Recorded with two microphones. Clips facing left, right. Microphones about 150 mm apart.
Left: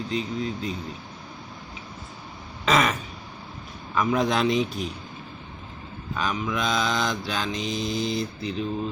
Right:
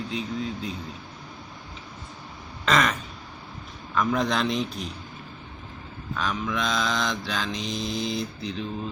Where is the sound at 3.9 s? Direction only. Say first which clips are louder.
Left 2 dB; 5° left (ahead or behind).